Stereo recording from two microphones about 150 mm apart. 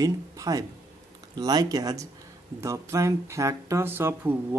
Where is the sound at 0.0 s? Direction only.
20° right (ahead or behind).